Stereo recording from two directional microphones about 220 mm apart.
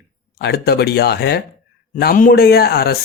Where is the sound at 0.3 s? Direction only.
45° left (ahead or behind).